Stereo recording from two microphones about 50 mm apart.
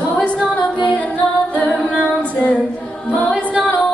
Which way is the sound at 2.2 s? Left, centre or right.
Left.